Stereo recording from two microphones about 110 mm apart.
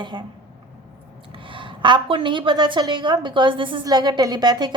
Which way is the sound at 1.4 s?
50° right (ahead or behind).